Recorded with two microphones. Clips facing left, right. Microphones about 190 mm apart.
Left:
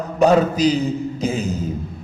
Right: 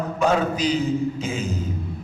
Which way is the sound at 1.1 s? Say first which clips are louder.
Left 5 dB; 40° left (ahead or behind).